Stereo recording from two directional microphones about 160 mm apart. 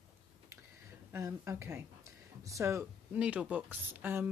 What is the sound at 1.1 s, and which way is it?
Speech, 20° right (ahead or behind).